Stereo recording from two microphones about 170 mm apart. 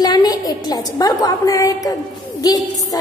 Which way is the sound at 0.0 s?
25° left (ahead or behind).